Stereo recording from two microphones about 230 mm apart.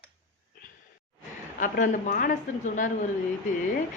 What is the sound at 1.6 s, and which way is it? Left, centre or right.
Speech, left.